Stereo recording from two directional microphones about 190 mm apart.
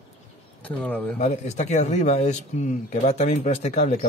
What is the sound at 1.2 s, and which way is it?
Speech, 35° left (ahead or behind).